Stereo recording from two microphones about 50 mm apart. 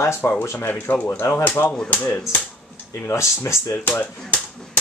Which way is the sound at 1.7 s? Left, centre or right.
Centre.